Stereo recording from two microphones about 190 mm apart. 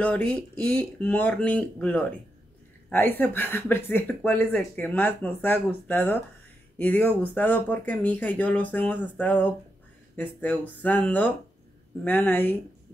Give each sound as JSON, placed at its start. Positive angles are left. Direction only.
{"t": 0.0, "sound": "speech", "side_deg": 10}